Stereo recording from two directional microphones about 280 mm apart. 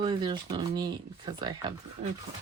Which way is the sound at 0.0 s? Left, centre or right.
Centre.